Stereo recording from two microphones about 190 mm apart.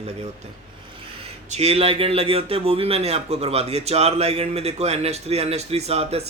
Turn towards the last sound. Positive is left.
turn(degrees=-35)  # may be behind; listen again after turning